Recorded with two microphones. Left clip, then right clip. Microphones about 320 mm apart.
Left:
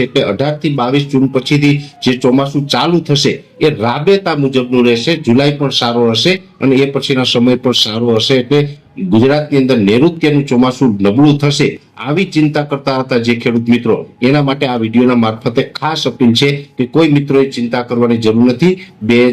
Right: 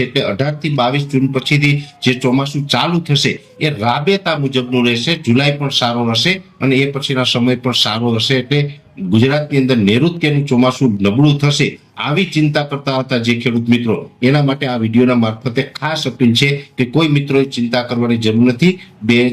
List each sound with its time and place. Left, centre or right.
0.0 s speech: right